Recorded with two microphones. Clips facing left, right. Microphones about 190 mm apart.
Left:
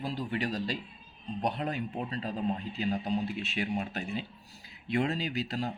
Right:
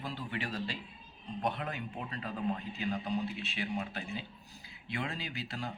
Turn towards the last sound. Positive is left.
turn(degrees=35)  # may be behind; listen again after turning